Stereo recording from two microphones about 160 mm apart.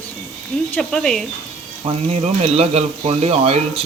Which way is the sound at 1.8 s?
40° right (ahead or behind).